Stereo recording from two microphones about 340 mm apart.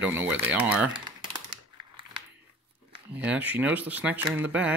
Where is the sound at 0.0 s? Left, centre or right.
Centre.